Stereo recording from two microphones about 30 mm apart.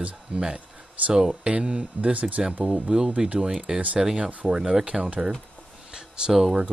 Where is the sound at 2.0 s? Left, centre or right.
Right.